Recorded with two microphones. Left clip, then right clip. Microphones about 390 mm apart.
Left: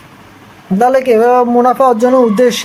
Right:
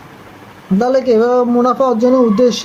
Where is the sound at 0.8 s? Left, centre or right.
Left.